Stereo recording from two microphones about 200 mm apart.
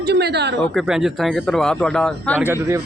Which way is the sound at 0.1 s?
55° right (ahead or behind).